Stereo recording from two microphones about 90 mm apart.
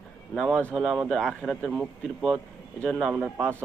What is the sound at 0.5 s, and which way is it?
Speech, 15° left (ahead or behind).